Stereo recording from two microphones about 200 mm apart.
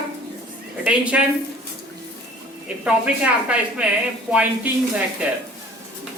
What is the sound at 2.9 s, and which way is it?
A woman's voice, 5° right (ahead or behind).